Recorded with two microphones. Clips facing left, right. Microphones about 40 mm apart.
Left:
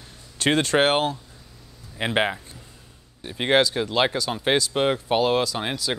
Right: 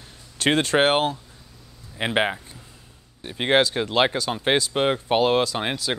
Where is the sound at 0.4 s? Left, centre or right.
Right.